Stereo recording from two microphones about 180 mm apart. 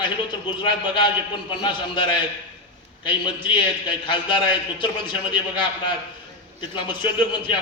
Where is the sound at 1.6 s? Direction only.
25° left (ahead or behind).